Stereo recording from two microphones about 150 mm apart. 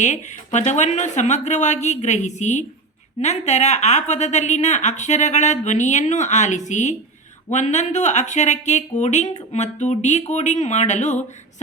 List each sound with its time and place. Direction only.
0.0 s a woman's voice: 55° left (ahead or behind)